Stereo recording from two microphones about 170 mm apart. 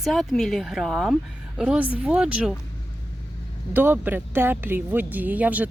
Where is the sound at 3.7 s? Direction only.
10° right (ahead or behind).